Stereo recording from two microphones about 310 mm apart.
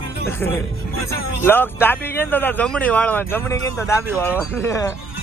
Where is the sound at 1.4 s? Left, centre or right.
Centre.